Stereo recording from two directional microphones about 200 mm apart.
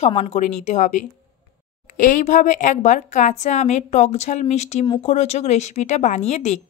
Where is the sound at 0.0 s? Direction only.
35° left (ahead or behind).